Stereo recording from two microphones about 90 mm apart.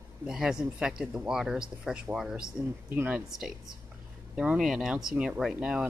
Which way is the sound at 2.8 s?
20° right (ahead or behind).